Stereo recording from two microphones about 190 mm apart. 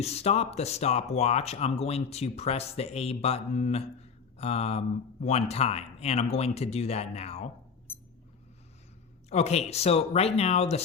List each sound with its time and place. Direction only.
0.0 s speech: 35° left (ahead or behind)
9.3 s speech: 35° left (ahead or behind)